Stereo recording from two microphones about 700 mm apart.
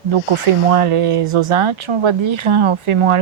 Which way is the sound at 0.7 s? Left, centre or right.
Right.